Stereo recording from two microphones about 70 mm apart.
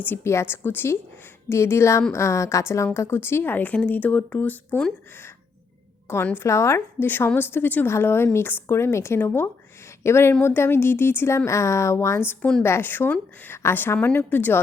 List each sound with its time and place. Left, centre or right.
0.3 s speech: left
6.3 s speech: left
7.3 s speech: left